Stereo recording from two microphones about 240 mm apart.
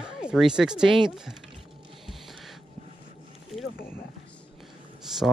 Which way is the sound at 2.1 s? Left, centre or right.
Centre.